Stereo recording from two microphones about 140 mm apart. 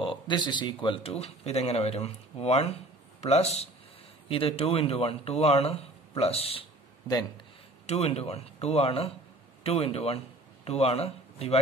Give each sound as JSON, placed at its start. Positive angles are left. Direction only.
{"t": 0.0, "sound": "speech", "side_deg": 35}
{"t": 7.8, "sound": "speech", "side_deg": 50}